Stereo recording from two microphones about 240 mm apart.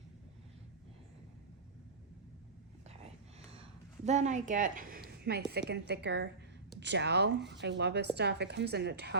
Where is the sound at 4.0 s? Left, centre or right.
Right.